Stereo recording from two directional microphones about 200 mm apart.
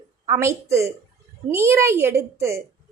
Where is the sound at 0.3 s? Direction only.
15° right (ahead or behind).